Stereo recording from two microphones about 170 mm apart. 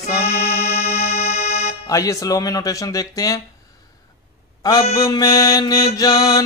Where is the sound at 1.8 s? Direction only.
20° left (ahead or behind).